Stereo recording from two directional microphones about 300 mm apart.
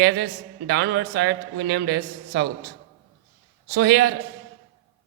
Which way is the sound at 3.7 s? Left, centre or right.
Right.